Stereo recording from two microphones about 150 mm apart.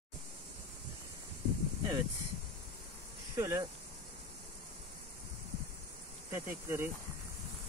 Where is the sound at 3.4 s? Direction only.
20° right (ahead or behind).